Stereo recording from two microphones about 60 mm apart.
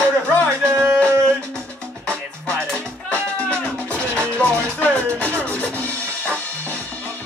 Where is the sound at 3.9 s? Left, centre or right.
Centre.